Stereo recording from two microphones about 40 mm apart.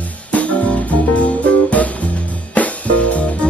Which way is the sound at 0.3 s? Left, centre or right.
Left.